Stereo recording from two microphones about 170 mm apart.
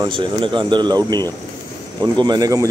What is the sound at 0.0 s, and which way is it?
A man's voice, 30° right (ahead or behind).